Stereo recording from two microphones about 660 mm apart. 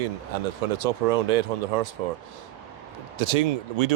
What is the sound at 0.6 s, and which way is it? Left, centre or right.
Speech, right.